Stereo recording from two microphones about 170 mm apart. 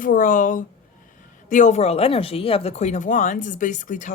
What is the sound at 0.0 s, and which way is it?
Speech, 50° left (ahead or behind).